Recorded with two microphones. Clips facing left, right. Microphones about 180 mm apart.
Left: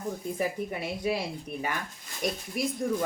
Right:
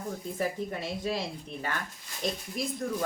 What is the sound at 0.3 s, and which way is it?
Speech, 10° left (ahead or behind).